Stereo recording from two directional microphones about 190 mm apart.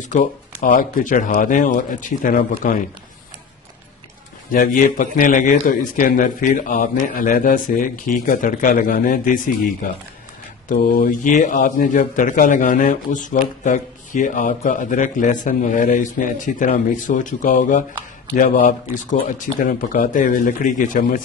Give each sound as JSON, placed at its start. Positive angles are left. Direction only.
{"t": 0.0, "sound": "speech", "side_deg": 45}
{"t": 4.5, "sound": "speech", "side_deg": 45}